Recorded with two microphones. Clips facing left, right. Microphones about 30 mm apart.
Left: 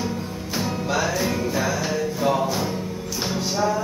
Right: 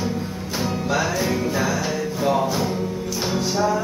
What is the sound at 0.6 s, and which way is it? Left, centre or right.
Music, centre.